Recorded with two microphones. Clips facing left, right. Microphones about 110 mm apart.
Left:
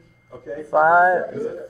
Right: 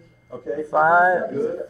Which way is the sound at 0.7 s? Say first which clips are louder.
Left 2 dB; 5° left (ahead or behind).